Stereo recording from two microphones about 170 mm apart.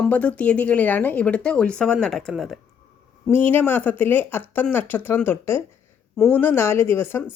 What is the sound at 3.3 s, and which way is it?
Speech, 10° left (ahead or behind).